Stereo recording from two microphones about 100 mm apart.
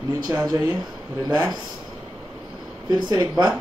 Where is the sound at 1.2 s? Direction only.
45° right (ahead or behind).